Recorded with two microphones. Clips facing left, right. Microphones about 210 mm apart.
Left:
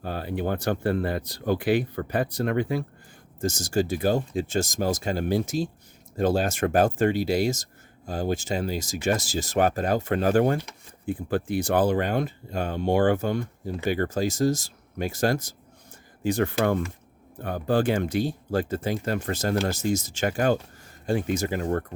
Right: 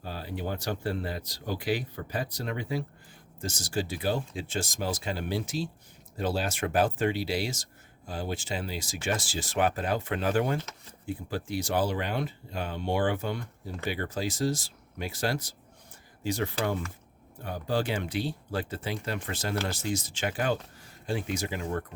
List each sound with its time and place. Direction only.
0.0 s speech: 55° left (ahead or behind)
3.4 s speech: 45° left (ahead or behind)